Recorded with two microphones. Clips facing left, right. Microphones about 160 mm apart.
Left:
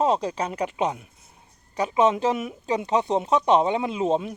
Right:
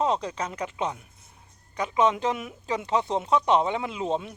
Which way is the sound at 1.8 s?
30° left (ahead or behind).